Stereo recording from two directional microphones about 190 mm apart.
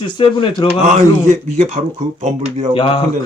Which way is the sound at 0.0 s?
25° left (ahead or behind).